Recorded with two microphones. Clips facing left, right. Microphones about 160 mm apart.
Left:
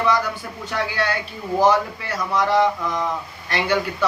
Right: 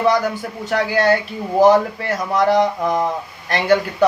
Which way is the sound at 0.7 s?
45° right (ahead or behind).